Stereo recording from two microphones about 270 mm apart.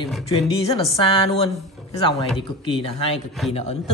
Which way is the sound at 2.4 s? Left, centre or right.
Centre.